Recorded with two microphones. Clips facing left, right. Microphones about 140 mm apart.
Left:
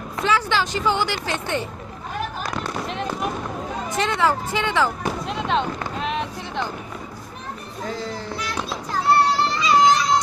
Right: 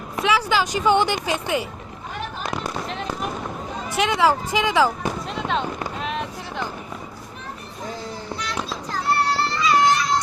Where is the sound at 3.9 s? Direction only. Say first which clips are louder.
Right 2 dB; 10° right (ahead or behind).